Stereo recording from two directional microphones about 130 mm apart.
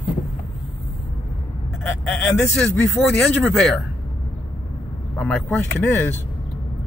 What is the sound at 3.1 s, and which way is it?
Speech, 5° left (ahead or behind).